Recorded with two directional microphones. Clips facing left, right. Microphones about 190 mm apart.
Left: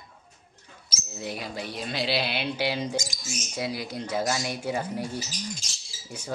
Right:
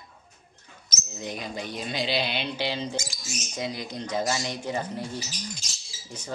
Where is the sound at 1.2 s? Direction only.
5° left (ahead or behind).